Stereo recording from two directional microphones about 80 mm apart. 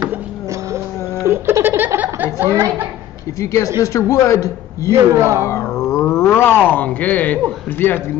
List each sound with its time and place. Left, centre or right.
1.2 s a sound: right
3.3 s speech: left
5.1 s speech: right
5.5 s speech: left; by 7.3 s centre